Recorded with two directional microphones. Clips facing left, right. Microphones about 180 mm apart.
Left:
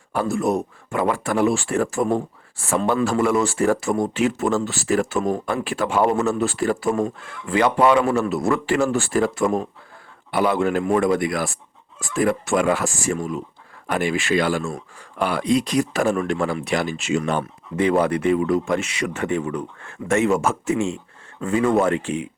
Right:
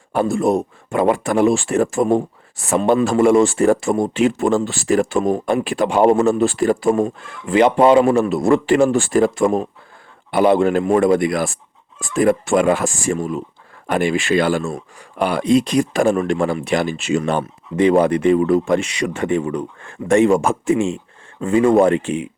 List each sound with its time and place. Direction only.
0.1 s speech: 25° right (ahead or behind)
21.4 s speech: 25° right (ahead or behind)